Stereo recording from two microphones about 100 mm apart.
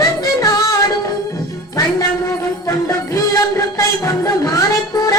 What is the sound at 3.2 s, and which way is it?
Music, 35° left (ahead or behind).